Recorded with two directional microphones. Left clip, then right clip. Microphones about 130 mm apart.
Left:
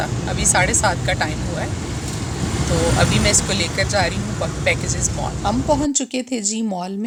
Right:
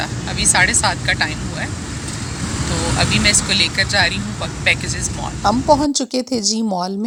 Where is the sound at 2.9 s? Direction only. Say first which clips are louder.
Right 5 dB; 20° left (ahead or behind).